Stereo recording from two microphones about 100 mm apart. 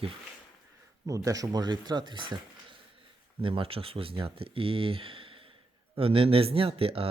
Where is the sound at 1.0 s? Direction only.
35° right (ahead or behind); by 2.3 s 50° right (ahead or behind).